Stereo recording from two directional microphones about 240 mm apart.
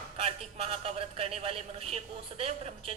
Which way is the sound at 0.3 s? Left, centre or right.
Right.